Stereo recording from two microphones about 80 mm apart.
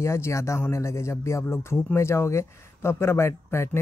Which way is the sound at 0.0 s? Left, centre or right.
Left.